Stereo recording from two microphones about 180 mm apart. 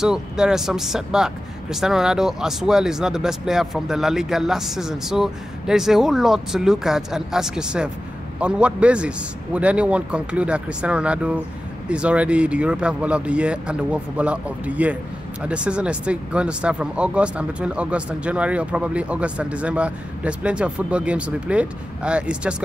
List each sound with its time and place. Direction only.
0.0 s speech: 5° right (ahead or behind)